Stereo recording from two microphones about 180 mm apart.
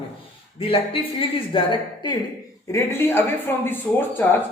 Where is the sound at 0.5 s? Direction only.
30° left (ahead or behind).